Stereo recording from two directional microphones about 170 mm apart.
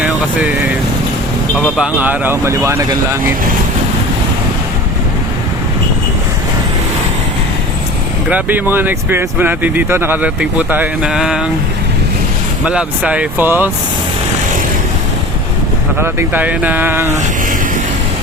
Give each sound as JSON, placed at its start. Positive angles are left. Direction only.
{"t": 0.0, "sound": "speech", "side_deg": -10}
{"t": 8.3, "sound": "speech", "side_deg": -10}
{"t": 12.6, "sound": "speech", "side_deg": -5}
{"t": 16.0, "sound": "speech", "side_deg": -10}